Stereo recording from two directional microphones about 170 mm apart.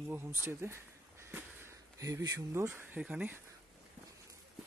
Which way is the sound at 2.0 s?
20° right (ahead or behind).